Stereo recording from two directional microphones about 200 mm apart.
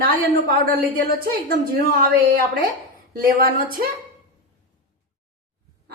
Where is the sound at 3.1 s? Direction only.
45° right (ahead or behind).